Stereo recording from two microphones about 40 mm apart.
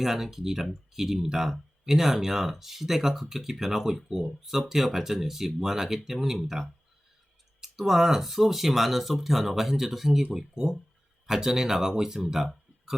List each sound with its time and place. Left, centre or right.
0.0 s speech: centre